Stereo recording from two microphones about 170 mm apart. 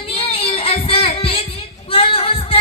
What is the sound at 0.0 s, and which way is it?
Music, 30° left (ahead or behind).